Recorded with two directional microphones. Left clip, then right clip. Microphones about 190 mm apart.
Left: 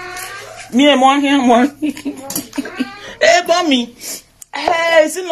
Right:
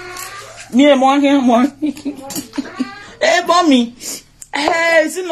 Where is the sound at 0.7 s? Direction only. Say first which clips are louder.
Even; 10° right (ahead or behind).